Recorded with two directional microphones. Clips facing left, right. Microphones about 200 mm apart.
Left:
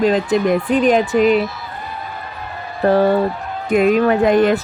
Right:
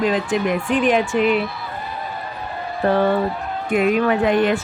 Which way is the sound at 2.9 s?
35° left (ahead or behind).